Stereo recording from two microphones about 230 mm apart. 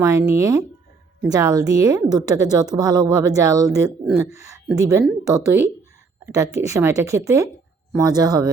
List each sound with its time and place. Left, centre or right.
0.0 s a woman's voice: centre